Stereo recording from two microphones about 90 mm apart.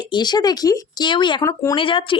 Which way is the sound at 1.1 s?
60° left (ahead or behind).